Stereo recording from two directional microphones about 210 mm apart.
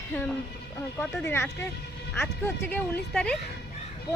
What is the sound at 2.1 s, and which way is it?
A woman's voice, 10° left (ahead or behind).